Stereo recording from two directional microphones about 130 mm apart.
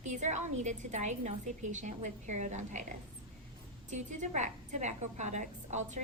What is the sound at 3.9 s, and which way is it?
A woman's voice, 65° right (ahead or behind).